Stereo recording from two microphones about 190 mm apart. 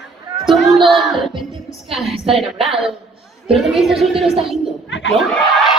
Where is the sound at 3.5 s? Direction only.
Centre (ahead or behind).